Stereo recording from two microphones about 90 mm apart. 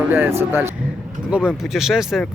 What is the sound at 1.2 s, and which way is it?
Speech, 10° right (ahead or behind).